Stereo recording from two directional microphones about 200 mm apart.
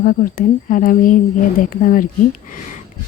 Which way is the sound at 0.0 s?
45° left (ahead or behind).